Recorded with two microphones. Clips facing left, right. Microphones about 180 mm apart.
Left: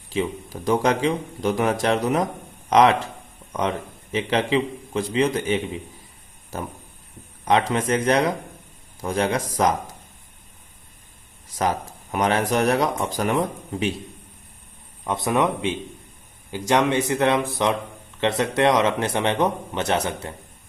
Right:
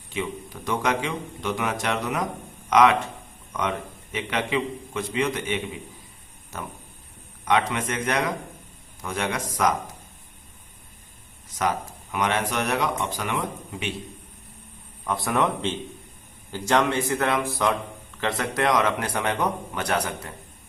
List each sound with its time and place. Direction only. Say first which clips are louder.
0.1 s a man's voice: left 5 dB; 35° left (ahead or behind)
7.4 s a man's voice: left 3 dB; 30° left (ahead or behind)
12.1 s a man's voice: left 4 dB; 35° left (ahead or behind)
15.0 s speech: left 3 dB; 20° left (ahead or behind)